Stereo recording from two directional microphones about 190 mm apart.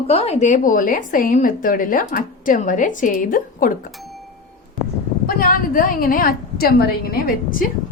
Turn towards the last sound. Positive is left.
turn(degrees=50)  # may be behind; listen again after turning